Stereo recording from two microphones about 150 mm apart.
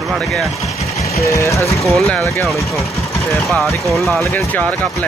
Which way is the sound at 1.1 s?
20° left (ahead or behind).